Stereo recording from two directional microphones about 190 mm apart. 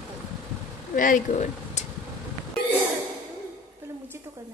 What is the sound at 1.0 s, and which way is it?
Speech, 45° left (ahead or behind).